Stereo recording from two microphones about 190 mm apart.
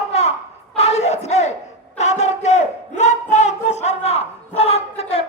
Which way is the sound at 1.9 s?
35° left (ahead or behind).